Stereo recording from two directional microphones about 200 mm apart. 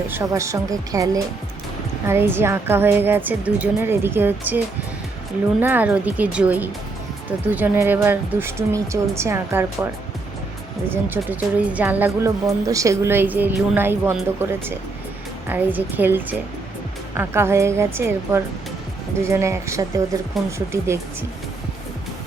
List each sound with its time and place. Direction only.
0.1 s speech: 15° right (ahead or behind)
15.4 s speech: 10° right (ahead or behind)
20.4 s speech: centre (ahead or behind)
20.8 s speech: 15° right (ahead or behind)